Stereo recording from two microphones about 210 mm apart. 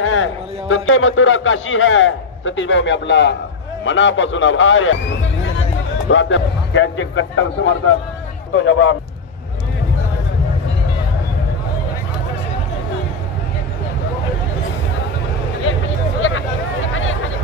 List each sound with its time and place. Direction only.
0.0 s a man's voice: 70° left (ahead or behind)
6.0 s a man's voice: 65° left (ahead or behind)
16.2 s a sound: 70° left (ahead or behind)